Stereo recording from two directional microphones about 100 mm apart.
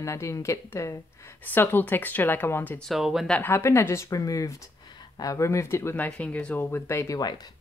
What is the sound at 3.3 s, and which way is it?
Speech, 20° left (ahead or behind).